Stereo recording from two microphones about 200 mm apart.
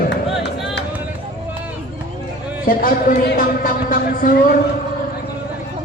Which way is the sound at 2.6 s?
45° left (ahead or behind).